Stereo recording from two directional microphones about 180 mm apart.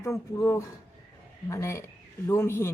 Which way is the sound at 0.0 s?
15° left (ahead or behind).